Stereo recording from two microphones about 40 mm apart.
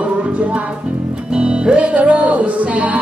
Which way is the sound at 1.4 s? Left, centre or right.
Right.